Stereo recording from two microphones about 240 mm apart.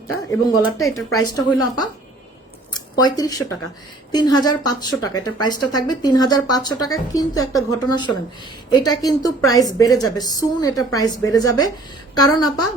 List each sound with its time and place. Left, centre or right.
0.3 s speech: centre
3.0 s speech: centre